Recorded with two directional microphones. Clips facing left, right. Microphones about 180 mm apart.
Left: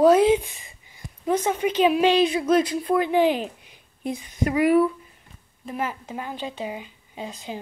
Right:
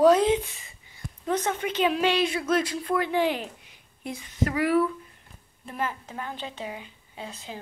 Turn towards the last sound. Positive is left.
turn(degrees=15)  # may be behind; listen again after turning